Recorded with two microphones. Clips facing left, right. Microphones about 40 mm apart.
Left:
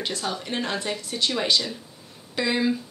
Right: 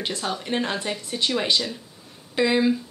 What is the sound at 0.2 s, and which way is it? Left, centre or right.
Speech, centre.